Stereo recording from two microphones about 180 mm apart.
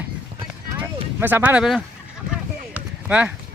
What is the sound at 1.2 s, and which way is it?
Speech, 10° right (ahead or behind).